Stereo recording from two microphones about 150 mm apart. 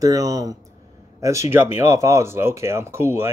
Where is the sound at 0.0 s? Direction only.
25° right (ahead or behind).